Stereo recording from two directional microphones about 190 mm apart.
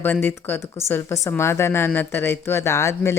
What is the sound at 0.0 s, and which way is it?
Speech, 10° left (ahead or behind).